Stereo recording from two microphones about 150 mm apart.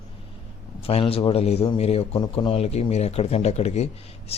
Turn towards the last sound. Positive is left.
turn(degrees=45)  # may be behind; listen again after turning